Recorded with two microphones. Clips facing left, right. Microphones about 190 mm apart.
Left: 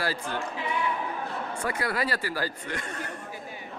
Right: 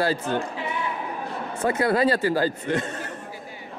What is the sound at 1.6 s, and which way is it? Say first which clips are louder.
Speech: right 10 dB; 25° right (ahead or behind).